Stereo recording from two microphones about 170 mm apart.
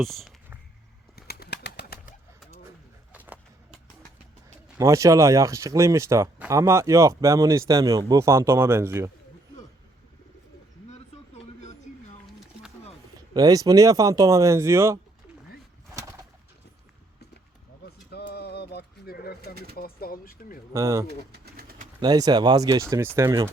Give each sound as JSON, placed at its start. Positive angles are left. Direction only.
{"t": 0.0, "sound": "speech", "side_deg": 0}
{"t": 1.1, "sound": "bird", "side_deg": 70}
{"t": 2.6, "sound": "a sound", "side_deg": -10}
{"t": 4.8, "sound": "speech", "side_deg": -20}
{"t": 13.3, "sound": "speech", "side_deg": -20}
{"t": 18.1, "sound": "pigeon", "side_deg": 70}
{"t": 19.7, "sound": "speech", "side_deg": 60}
{"t": 20.7, "sound": "speech", "side_deg": -20}
{"t": 21.3, "sound": "bird", "side_deg": -65}
{"t": 22.0, "sound": "speech", "side_deg": -25}